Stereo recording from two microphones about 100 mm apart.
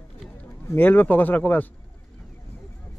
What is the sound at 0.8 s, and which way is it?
Speech, 20° left (ahead or behind).